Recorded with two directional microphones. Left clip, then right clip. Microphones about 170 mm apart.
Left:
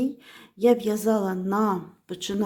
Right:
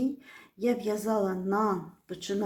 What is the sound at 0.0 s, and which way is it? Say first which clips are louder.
Speech: left 3 dB; 55° left (ahead or behind).